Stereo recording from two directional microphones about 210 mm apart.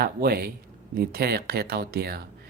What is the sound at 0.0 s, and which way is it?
Speech, 45° right (ahead or behind).